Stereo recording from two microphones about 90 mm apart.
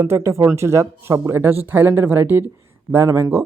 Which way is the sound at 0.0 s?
30° right (ahead or behind).